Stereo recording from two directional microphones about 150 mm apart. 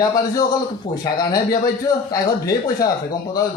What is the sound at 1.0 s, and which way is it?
Speech, 25° left (ahead or behind).